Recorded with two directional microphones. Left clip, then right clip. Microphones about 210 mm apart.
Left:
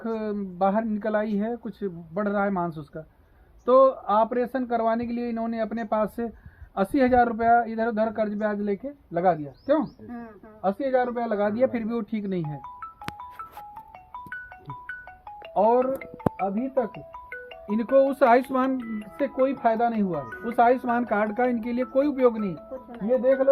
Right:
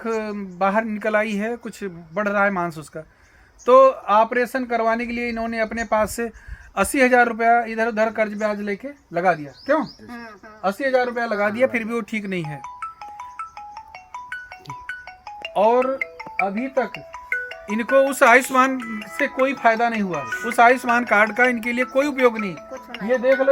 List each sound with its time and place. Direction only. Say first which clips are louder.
0.0 s speech: right 4 dB; 20° right (ahead or behind)
1.4 s speech: right 3 dB; 40° right (ahead or behind)
2.1 s speech: right 6 dB; 25° right (ahead or behind)
3.7 s speech: right 5 dB; 20° right (ahead or behind)
10.8 s speech: right 5 dB; 30° right (ahead or behind)
12.6 s music: right 5 dB; centre (ahead or behind)
15.5 s speech: right 3 dB; 40° right (ahead or behind)
15.8 s music: right 3 dB; 5° right (ahead or behind)
16.6 s speech: right 3 dB; 20° right (ahead or behind)
16.9 s speech: right 11 dB; 5° right (ahead or behind)
23.0 s speech: right 3 dB; 20° right (ahead or behind)